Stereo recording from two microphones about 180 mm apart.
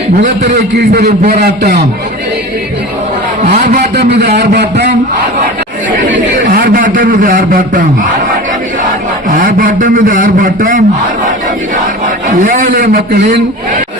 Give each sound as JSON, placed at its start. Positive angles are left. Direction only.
{"t": 0.4, "sound": "a man's voice", "side_deg": -65}
{"t": 3.9, "sound": "a man's voice", "side_deg": -65}
{"t": 6.3, "sound": "a man's voice", "side_deg": -50}
{"t": 9.3, "sound": "a man's voice", "side_deg": -50}
{"t": 12.4, "sound": "a man's voice", "side_deg": -50}